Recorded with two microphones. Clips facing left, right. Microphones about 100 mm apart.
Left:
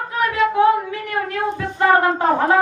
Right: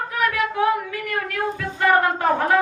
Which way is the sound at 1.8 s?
25° left (ahead or behind).